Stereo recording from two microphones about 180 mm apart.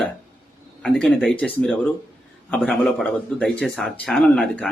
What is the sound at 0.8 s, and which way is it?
A man's voice, 5° left (ahead or behind).